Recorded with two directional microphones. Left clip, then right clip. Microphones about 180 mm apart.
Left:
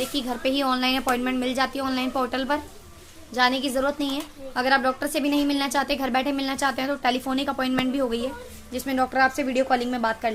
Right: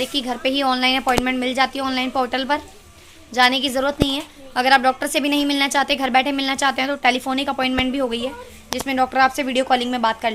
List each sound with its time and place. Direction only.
0.0 s a woman's voice: 10° right (ahead or behind)